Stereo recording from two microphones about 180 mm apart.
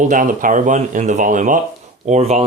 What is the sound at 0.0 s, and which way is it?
Speech, 45° right (ahead or behind).